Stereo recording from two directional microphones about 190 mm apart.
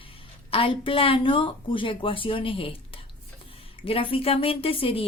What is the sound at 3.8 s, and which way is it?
Speech, 30° left (ahead or behind).